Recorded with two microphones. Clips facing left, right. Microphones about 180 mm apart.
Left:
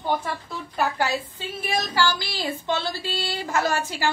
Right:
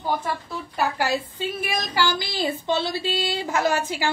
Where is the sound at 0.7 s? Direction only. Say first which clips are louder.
Right 1 dB; 10° right (ahead or behind).